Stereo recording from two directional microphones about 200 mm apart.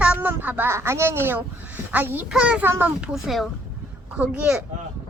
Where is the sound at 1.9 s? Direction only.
10° right (ahead or behind).